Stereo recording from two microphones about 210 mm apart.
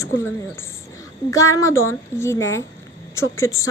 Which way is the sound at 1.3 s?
15° left (ahead or behind).